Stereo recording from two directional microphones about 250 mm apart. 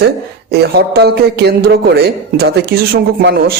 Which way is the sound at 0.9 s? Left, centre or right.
Right.